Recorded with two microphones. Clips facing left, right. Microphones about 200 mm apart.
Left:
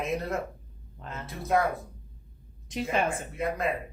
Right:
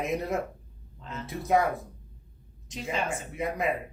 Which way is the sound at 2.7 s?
55° left (ahead or behind).